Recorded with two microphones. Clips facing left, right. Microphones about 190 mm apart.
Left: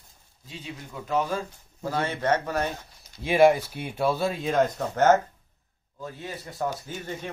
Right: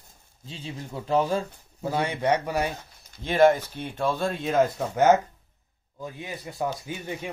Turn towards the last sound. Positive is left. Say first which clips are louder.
# right 1 dB
turn(degrees=-10)  # may be behind; listen again after turning